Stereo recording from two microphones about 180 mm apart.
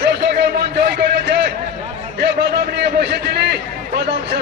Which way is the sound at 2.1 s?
70° right (ahead or behind).